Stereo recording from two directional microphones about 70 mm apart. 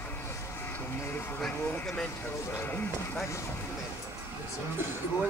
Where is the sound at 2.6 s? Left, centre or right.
Left.